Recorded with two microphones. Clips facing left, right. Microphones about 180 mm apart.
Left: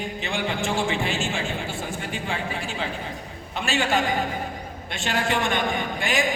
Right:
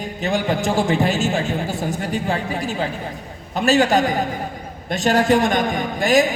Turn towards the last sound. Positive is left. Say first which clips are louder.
# right 8 dB
turn(degrees=-40)  # may be behind; listen again after turning